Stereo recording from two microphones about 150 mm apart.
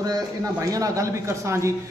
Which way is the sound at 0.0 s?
25° right (ahead or behind).